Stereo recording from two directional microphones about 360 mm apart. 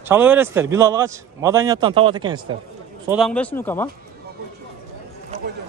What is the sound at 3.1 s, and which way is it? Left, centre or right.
Speech, centre.